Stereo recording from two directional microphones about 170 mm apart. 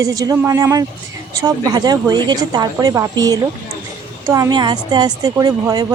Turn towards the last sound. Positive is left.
turn(degrees=-25)  # may be behind; listen again after turning